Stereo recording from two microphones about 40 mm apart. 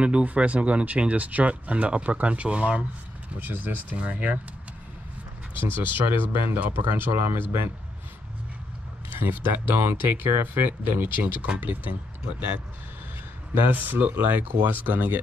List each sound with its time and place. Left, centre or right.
0.0 s speech: right
3.3 s speech: right
5.6 s speech: right
9.1 s speech: right
10.5 s speech: right
13.7 s speech: right